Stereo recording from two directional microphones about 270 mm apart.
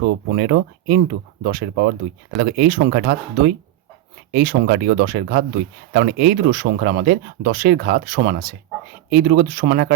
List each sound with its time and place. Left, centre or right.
0.3 s speech: right